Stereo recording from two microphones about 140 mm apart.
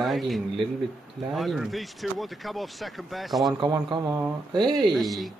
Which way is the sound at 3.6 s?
35° right (ahead or behind).